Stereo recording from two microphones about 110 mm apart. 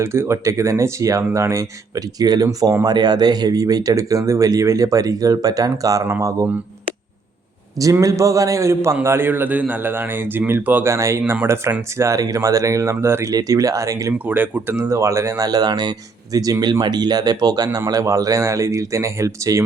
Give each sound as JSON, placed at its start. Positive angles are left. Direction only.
{"t": 0.0, "sound": "speech", "side_deg": -25}
{"t": 7.8, "sound": "speech", "side_deg": -30}
{"t": 14.1, "sound": "speech", "side_deg": -15}
{"t": 15.4, "sound": "speech", "side_deg": -40}